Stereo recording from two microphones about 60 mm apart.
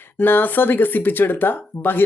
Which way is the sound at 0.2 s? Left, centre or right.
Left.